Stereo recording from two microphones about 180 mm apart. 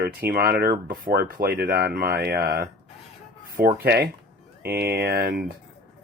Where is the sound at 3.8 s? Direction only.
60° right (ahead or behind).